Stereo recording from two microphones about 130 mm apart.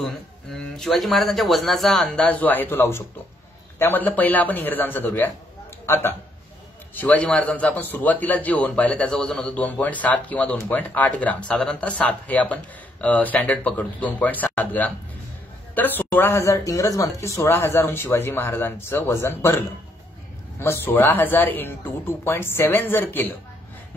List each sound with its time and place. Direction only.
0.0 s speech: 5° left (ahead or behind)
7.0 s speech: 10° left (ahead or behind)